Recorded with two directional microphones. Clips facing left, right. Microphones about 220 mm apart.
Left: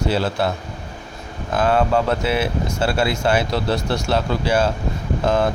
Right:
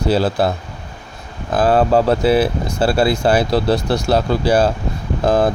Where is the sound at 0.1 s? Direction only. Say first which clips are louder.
Right 7 dB; 35° right (ahead or behind).